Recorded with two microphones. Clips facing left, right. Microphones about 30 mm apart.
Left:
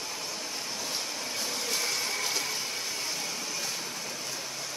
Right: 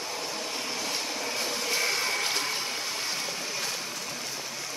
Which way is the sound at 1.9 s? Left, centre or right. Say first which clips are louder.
Right 3 dB; right.